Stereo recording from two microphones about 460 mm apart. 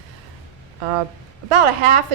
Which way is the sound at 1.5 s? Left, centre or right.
Right.